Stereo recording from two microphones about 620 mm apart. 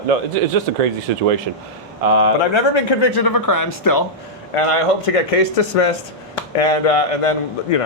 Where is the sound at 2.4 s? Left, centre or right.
Left.